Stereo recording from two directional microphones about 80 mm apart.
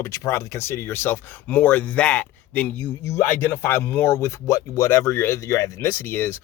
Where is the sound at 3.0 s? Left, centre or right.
Left.